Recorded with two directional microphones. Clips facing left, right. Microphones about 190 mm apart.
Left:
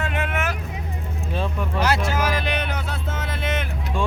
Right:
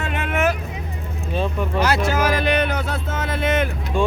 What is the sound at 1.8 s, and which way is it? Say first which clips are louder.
Speech: right 3 dB; 40° right (ahead or behind).